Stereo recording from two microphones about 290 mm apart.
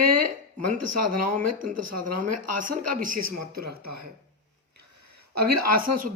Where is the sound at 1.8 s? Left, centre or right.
Right.